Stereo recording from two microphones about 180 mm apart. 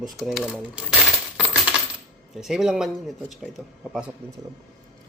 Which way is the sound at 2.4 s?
Centre (ahead or behind).